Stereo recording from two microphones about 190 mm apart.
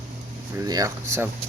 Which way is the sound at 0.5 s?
20° right (ahead or behind).